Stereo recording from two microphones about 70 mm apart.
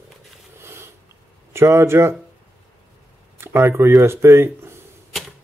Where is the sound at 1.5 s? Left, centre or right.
Right.